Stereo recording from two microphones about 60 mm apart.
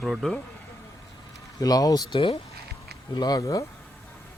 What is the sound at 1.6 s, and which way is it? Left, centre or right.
Speech, left.